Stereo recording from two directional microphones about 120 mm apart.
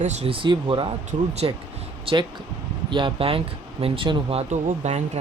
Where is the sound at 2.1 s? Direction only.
50° right (ahead or behind).